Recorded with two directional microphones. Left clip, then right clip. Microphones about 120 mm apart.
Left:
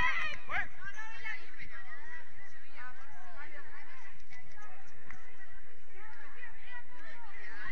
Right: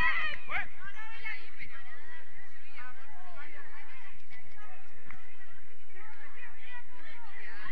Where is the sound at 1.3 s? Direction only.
50° left (ahead or behind).